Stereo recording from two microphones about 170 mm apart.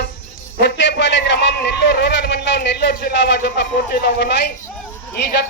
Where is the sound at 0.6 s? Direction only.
90° left; by 4.5 s 70° left (ahead or behind).